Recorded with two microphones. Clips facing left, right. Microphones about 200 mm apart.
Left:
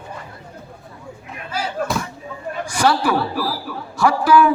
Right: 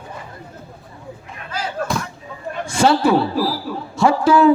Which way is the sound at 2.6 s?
25° right (ahead or behind).